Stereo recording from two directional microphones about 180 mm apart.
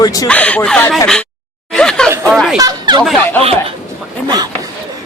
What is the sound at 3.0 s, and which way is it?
Speech, centre (ahead or behind).